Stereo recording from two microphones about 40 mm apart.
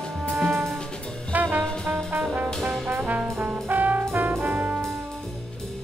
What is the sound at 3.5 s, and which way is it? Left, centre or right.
Brass instrument, right.